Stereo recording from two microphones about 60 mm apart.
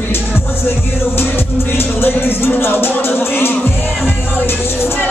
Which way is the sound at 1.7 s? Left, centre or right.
Left.